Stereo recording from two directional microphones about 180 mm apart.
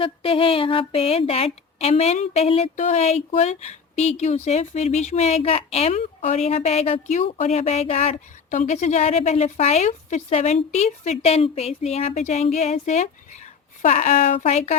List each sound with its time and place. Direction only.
0.0 s a woman's voice: 30° left (ahead or behind)